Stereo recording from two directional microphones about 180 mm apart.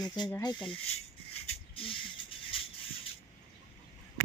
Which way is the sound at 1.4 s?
30° left (ahead or behind).